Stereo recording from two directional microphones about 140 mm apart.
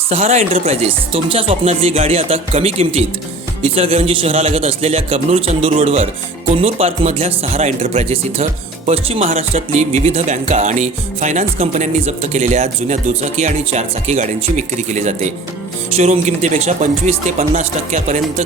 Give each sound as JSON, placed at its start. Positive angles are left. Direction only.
{"t": 0.1, "sound": "speech", "side_deg": -50}